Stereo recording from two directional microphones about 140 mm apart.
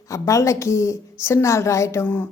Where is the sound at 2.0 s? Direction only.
10° left (ahead or behind).